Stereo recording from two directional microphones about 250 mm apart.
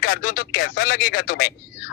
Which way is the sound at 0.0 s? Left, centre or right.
Left.